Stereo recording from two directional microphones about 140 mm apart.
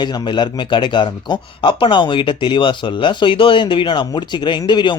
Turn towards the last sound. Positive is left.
turn(degrees=35)  # may be behind; listen again after turning